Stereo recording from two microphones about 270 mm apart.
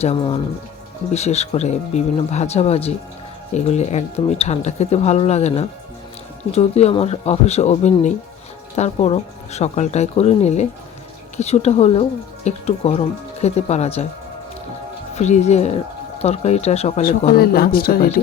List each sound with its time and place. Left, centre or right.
0.0 s speech: centre
15.1 s speech: left